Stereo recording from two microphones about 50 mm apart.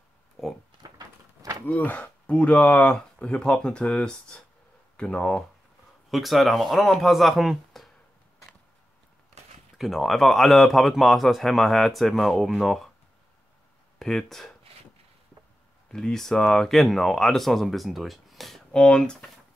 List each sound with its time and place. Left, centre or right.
1.7 s speech: left
6.0 s speech: centre
9.8 s speech: centre
13.9 s speech: centre
15.9 s speech: centre
18.7 s speech: centre